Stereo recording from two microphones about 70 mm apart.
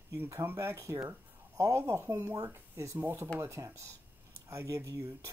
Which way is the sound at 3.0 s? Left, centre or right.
Right.